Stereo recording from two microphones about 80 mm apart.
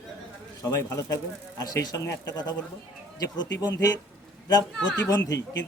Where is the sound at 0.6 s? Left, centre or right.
Left.